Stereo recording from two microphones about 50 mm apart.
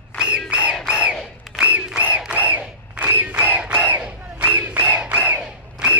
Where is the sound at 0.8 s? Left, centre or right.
Centre.